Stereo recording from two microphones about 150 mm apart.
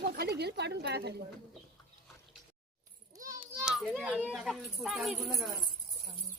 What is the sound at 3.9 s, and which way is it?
Speech, 10° right (ahead or behind).